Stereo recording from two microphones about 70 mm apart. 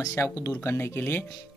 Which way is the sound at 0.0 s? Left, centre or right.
Left.